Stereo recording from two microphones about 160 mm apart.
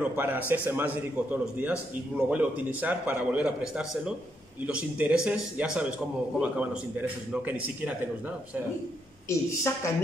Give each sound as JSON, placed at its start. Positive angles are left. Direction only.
{"t": 0.0, "sound": "a man's voice", "side_deg": -10}
{"t": 9.3, "sound": "a woman's voice", "side_deg": 20}